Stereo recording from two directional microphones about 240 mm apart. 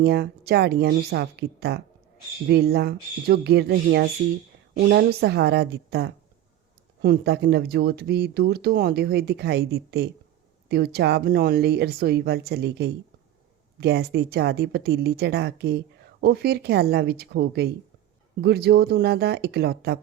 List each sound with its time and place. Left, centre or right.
0.0 s speech: right